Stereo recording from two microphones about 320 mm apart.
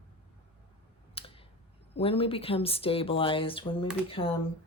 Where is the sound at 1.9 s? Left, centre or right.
Centre.